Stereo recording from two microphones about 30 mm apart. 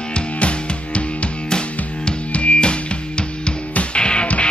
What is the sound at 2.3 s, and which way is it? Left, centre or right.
Music, left.